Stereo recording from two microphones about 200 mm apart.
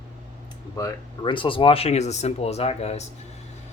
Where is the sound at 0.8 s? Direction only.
20° left (ahead or behind).